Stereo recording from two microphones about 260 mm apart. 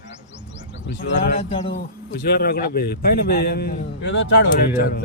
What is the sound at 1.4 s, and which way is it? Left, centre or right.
Speech, left.